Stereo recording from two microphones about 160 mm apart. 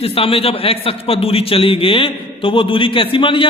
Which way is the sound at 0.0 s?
35° left (ahead or behind).